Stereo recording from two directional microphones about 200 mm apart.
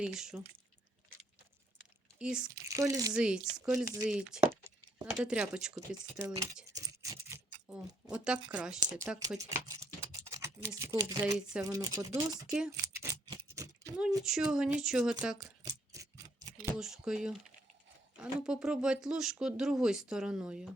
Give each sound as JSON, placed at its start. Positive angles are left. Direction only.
{"t": 0.0, "sound": "speech", "side_deg": -5}
{"t": 2.1, "sound": "speech", "side_deg": -5}
{"t": 2.5, "sound": "speech", "side_deg": -15}
{"t": 3.2, "sound": "speech", "side_deg": -5}
{"t": 5.9, "sound": "speech", "side_deg": -15}
{"t": 6.7, "sound": "a sound", "side_deg": -15}
{"t": 8.2, "sound": "speech", "side_deg": -5}
{"t": 9.0, "sound": "speech", "side_deg": -15}
{"t": 12.5, "sound": "speech", "side_deg": -5}
{"t": 12.8, "sound": "a sound", "side_deg": -15}
{"t": 14.5, "sound": "speech", "side_deg": -5}
{"t": 15.4, "sound": "a sound", "side_deg": -15}
{"t": 16.7, "sound": "speech", "side_deg": 0}